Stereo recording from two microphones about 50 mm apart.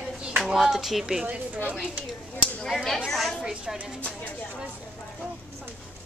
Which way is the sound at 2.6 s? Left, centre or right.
Centre.